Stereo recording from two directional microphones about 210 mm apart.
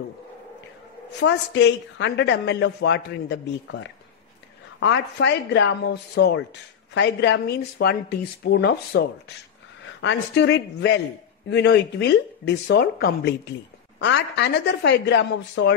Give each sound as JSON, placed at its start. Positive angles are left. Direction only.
{"t": 1.2, "sound": "a woman's voice", "side_deg": 55}
{"t": 10.0, "sound": "a woman's voice", "side_deg": 55}